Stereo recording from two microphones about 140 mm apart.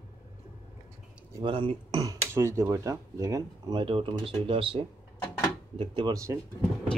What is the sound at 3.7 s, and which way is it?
Speech, 35° right (ahead or behind).